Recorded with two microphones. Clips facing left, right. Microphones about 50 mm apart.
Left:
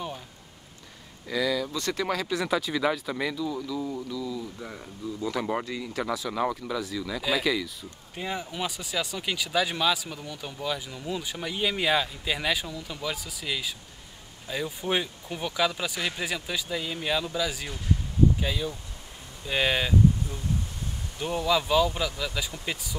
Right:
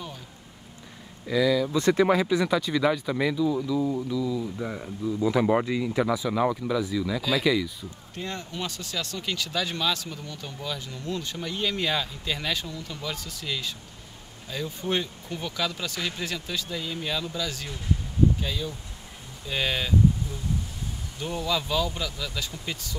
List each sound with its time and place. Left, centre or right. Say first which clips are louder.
1.2 s speech: right 4 dB; centre
1.7 s speech: right 8 dB; right
2.2 s speech: right 3 dB; centre
8.1 s speech: left 2 dB; centre
21.2 s speech: left 3 dB; centre